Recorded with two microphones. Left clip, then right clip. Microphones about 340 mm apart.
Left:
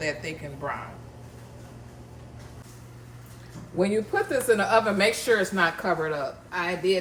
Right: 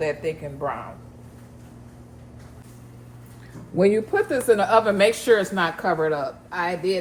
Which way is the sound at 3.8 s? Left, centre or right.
Right.